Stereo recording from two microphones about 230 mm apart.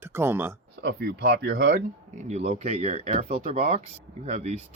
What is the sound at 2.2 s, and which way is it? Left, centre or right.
Speech, right.